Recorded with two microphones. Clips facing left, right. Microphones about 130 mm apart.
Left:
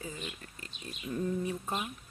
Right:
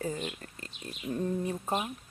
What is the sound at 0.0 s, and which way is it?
Speech, 45° right (ahead or behind).